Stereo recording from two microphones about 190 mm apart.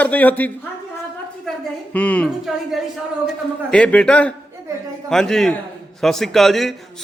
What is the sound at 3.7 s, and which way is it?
A man's voice, 5° left (ahead or behind).